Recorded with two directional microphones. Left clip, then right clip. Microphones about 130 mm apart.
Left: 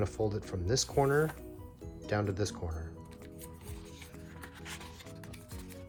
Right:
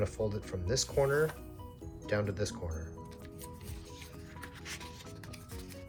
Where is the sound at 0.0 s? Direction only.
60° left (ahead or behind).